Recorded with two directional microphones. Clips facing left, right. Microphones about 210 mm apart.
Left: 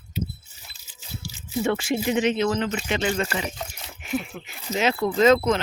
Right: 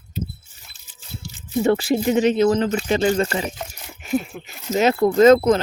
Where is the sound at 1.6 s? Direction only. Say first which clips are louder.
Right 5 dB; 35° right (ahead or behind).